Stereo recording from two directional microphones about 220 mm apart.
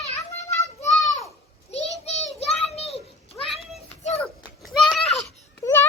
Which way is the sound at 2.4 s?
30° left (ahead or behind).